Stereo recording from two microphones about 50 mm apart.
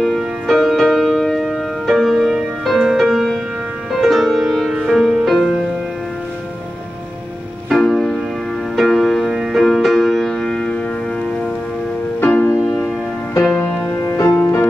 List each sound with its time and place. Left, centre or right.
0.0 s music: centre
4.7 s music: centre
7.7 s music: centre
12.3 s music: left
12.6 s music: centre
14.0 s music: left